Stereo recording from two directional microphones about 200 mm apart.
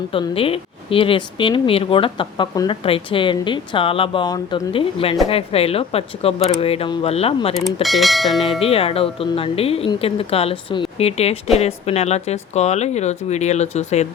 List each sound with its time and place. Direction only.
0.1 s a woman's voice: 25° left (ahead or behind)
7.5 s bell: centre (ahead or behind)
8.4 s a woman's voice: 30° left (ahead or behind)